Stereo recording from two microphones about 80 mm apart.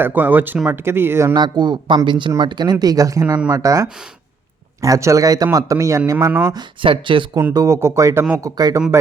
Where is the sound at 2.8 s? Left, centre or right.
Right.